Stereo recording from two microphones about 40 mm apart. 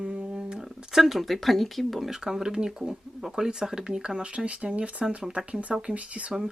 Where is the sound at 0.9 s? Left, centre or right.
Centre.